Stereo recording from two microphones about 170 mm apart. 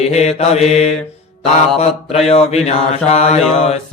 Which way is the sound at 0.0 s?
40° left (ahead or behind).